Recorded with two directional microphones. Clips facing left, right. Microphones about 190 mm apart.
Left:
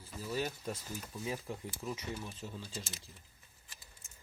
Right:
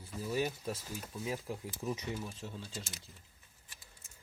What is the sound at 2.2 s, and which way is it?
Speech, 5° right (ahead or behind).